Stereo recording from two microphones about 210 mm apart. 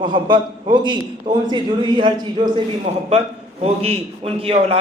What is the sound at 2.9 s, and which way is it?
A man's voice, 35° right (ahead or behind).